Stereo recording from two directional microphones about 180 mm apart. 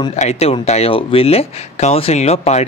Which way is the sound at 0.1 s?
40° left (ahead or behind).